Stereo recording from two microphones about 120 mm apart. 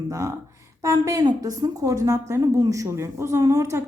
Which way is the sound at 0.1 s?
25° right (ahead or behind).